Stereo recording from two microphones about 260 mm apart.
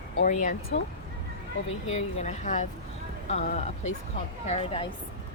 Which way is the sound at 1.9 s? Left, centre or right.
Left.